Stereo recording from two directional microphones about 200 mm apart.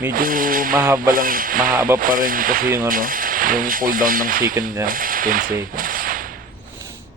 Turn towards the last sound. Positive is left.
turn(degrees=-45)  # may be behind; listen again after turning